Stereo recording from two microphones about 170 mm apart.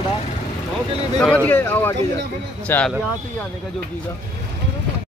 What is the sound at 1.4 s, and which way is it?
Speech, 10° left (ahead or behind).